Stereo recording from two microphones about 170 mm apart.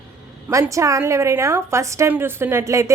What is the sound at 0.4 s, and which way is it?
A woman's voice, 15° right (ahead or behind).